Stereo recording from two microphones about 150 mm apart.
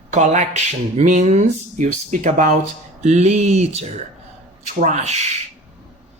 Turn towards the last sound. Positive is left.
turn(degrees=-50)  # may be behind; listen again after turning